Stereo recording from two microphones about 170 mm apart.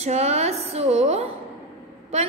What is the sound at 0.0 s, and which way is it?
A woman's voice, 40° right (ahead or behind).